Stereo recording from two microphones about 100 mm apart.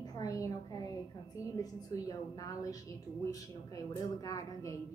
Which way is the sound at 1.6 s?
40° left (ahead or behind).